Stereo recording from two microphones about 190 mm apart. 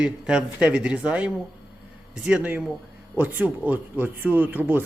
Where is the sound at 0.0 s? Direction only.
5° right (ahead or behind).